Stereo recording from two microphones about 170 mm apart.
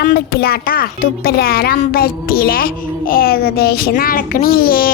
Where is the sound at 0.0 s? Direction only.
65° left (ahead or behind).